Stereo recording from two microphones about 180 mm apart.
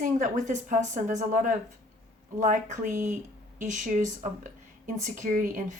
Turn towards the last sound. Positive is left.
turn(degrees=-45)  # may be behind; listen again after turning